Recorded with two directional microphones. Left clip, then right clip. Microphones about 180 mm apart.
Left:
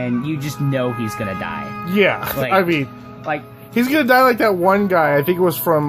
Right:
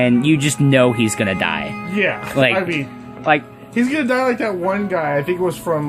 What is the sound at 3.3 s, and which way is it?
Speech, 35° right (ahead or behind).